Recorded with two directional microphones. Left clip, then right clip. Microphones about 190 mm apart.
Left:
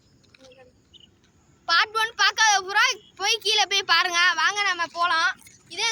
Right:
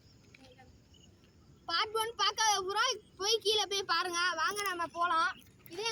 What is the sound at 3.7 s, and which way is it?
Speech, 15° left (ahead or behind).